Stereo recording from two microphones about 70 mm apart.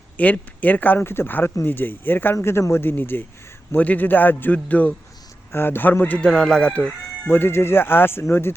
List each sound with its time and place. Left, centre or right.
0.2 s speech: left
2.3 s speech: left
5.5 s speech: left
6.2 s speech: centre
7.3 s speech: left